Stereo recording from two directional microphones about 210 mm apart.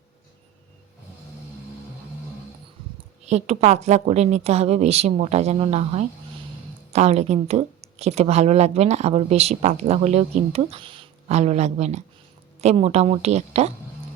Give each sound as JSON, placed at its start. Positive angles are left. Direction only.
{"t": 3.2, "sound": "speech", "side_deg": -30}